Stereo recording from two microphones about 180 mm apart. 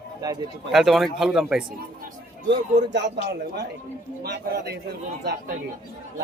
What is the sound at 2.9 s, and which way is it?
A man's voice, 70° right (ahead or behind).